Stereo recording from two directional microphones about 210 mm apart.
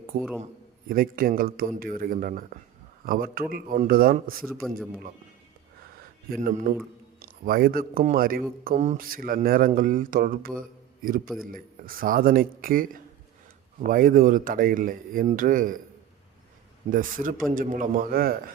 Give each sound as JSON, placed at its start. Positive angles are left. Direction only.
{"t": 0.9, "sound": "a man's voice", "side_deg": -45}
{"t": 6.3, "sound": "a man's voice", "side_deg": -40}
{"t": 16.9, "sound": "speech", "side_deg": -40}